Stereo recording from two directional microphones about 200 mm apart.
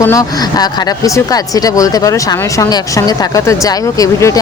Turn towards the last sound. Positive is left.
turn(degrees=15)  # may be behind; listen again after turning